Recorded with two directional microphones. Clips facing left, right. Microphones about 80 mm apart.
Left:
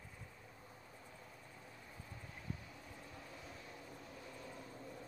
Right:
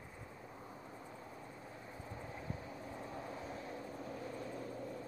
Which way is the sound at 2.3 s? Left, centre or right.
Right.